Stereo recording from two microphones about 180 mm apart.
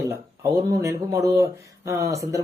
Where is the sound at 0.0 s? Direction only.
15° right (ahead or behind).